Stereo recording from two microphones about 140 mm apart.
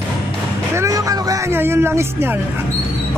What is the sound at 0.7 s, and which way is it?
Speech, 25° right (ahead or behind).